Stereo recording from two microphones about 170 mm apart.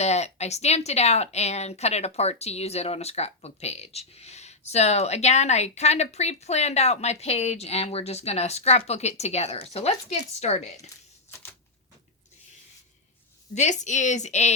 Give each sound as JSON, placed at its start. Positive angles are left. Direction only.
{"t": 0.0, "sound": "speech", "side_deg": 40}
{"t": 13.5, "sound": "a woman's voice", "side_deg": 45}